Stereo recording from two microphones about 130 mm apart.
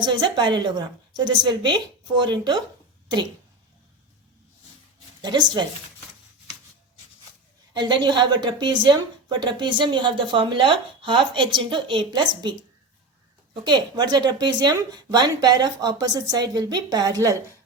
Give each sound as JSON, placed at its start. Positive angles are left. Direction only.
{"t": 0.0, "sound": "a woman's voice", "side_deg": -35}
{"t": 5.2, "sound": "a woman's voice", "side_deg": -35}
{"t": 7.7, "sound": "a woman's voice", "side_deg": -35}